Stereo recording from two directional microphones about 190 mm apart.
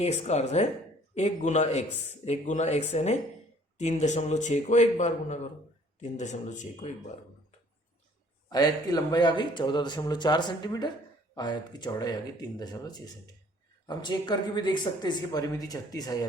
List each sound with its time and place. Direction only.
0.0 s a man's voice: 35° left (ahead or behind)
8.4 s speech: 20° left (ahead or behind)